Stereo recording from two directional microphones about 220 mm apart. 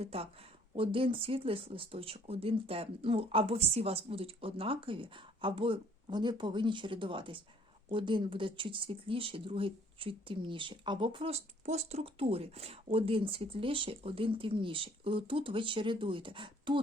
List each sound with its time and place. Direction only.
0.0 s speech: 25° right (ahead or behind)